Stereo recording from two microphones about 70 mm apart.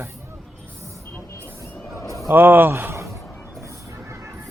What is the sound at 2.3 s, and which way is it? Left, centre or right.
Speech, right.